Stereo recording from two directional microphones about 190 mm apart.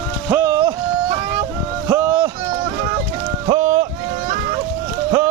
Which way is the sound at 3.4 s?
25° right (ahead or behind).